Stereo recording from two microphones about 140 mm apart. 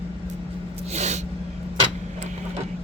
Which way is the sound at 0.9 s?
55° right (ahead or behind).